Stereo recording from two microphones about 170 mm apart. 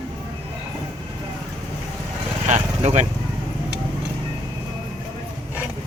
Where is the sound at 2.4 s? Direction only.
45° right (ahead or behind).